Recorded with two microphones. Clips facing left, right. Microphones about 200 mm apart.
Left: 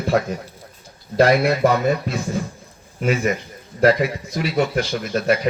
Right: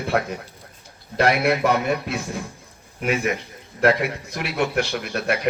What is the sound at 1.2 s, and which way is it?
A man's voice, 60° right (ahead or behind).